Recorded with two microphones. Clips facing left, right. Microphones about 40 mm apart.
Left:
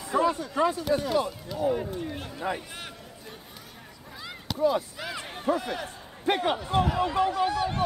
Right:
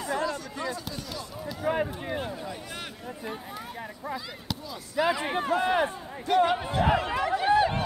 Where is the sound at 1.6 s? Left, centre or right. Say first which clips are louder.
Left 1 dB; right.